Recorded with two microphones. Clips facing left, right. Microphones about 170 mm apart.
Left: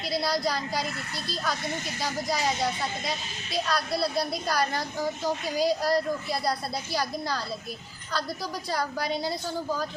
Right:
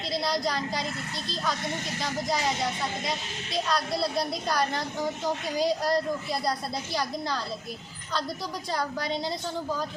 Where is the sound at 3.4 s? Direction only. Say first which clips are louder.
Even; 5° left (ahead or behind).